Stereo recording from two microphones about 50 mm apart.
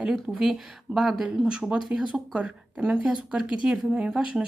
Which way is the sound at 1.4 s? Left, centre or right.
Centre.